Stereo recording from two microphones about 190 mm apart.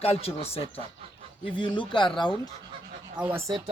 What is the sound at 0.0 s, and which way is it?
A man's voice, 30° left (ahead or behind).